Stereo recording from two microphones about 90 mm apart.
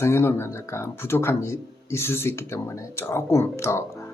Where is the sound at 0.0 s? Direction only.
30° left (ahead or behind).